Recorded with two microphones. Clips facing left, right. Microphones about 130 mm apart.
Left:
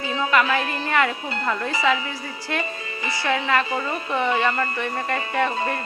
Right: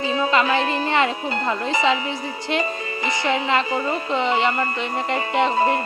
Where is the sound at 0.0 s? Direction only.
25° right (ahead or behind).